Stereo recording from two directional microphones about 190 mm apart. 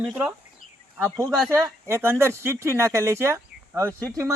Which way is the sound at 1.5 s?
15° right (ahead or behind).